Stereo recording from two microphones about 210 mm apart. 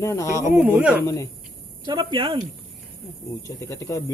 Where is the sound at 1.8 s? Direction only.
20° right (ahead or behind).